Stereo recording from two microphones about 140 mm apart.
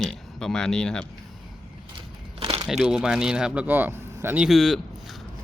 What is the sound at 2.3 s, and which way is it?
Crumpling, 45° right (ahead or behind).